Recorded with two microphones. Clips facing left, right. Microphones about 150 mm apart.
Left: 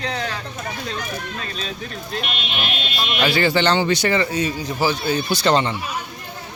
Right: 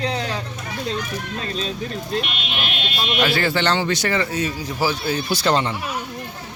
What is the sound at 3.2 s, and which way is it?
A man's voice, centre (ahead or behind).